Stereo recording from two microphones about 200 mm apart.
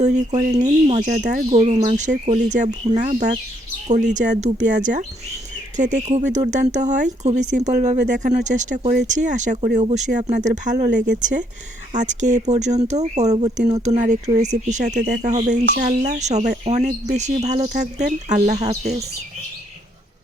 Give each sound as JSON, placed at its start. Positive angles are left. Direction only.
{"t": 0.0, "sound": "speech", "side_deg": -35}